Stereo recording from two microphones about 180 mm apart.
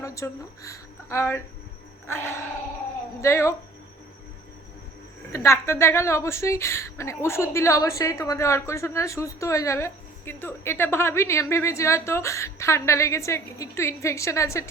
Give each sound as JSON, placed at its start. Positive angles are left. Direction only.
{"t": 0.0, "sound": "a woman's voice", "side_deg": 15}
{"t": 5.3, "sound": "a woman's voice", "side_deg": 15}